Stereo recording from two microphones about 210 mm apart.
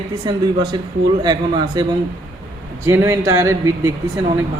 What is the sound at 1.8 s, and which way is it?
Speech, 20° right (ahead or behind).